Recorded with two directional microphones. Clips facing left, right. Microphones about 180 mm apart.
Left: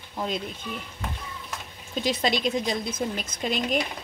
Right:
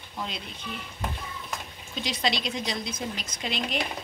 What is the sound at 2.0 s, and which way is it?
A woman's voice, 45° left (ahead or behind).